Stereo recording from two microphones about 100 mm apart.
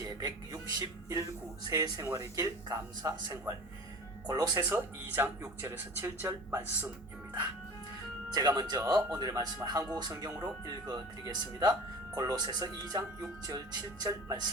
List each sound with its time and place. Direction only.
0.0 s speech: 40° right (ahead or behind)
4.7 s speech: 25° right (ahead or behind)
8.3 s speech: 40° right (ahead or behind)